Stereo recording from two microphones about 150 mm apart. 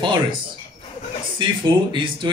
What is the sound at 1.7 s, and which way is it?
Speech, 30° right (ahead or behind).